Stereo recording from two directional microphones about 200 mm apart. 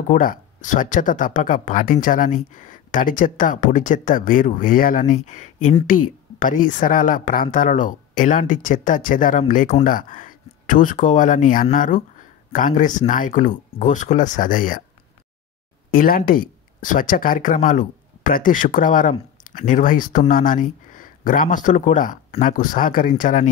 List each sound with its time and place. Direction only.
0.1 s speech: 40° left (ahead or behind)
15.9 s speech: 45° left (ahead or behind)